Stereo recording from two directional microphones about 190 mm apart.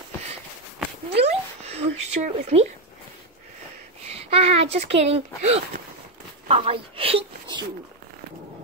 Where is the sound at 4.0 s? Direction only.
35° right (ahead or behind).